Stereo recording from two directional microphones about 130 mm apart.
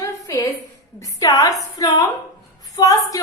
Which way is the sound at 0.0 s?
25° left (ahead or behind).